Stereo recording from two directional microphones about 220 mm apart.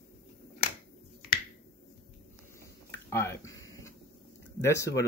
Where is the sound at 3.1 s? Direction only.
10° left (ahead or behind).